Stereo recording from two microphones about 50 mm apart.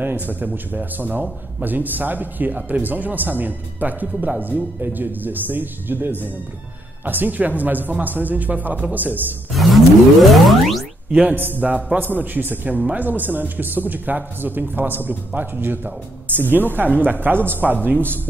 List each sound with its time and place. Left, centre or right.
0.0 s speech: right
9.5 s a sound: centre
10.2 s music: centre
11.1 s music: right
11.3 s speech: right